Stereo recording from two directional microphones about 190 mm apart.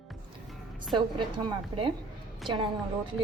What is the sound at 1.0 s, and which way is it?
Speech, 25° right (ahead or behind).